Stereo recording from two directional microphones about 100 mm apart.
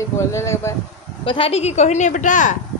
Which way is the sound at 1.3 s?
75° left (ahead or behind).